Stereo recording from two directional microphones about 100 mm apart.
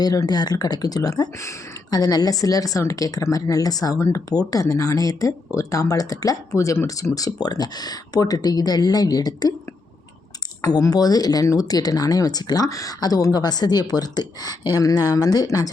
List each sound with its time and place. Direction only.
0.0 s speech: 40° left (ahead or behind)
10.6 s speech: 40° left (ahead or behind)